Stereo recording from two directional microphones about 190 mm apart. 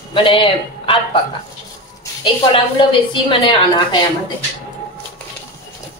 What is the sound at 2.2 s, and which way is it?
A woman's voice, 25° left (ahead or behind).